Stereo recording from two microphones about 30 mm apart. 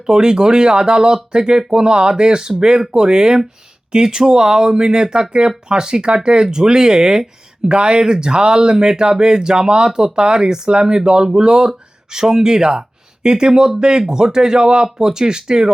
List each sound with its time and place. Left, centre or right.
0.0 s speech: right